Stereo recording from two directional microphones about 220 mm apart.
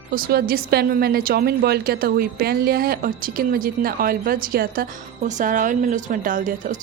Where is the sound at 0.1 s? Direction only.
40° right (ahead or behind).